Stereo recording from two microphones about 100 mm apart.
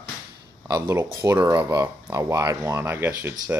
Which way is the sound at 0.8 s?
30° right (ahead or behind).